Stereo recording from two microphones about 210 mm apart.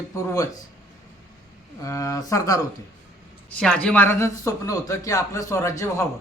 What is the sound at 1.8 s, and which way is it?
Speech, 15° left (ahead or behind).